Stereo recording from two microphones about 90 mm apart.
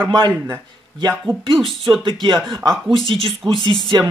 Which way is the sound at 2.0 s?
60° right (ahead or behind).